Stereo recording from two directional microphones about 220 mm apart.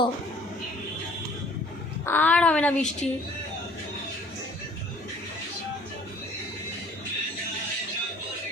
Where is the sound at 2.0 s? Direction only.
5° left (ahead or behind).